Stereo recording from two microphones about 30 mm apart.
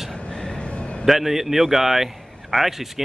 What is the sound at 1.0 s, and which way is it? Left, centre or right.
Speech, centre.